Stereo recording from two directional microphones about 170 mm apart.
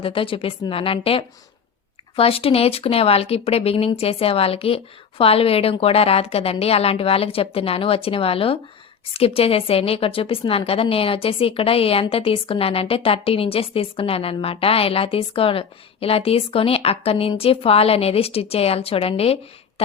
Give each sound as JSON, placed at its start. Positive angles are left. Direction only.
{"t": 0.0, "sound": "a woman's voice", "side_deg": 30}